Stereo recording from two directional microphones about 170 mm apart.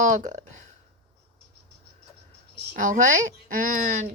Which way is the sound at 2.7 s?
50° right (ahead or behind).